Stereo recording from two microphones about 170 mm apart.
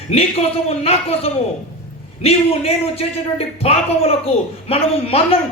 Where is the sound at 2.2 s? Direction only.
35° left (ahead or behind).